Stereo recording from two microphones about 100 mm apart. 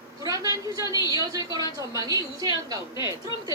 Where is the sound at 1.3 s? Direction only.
35° right (ahead or behind).